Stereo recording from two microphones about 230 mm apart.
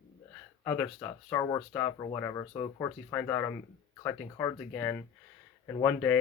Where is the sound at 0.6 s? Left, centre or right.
Centre.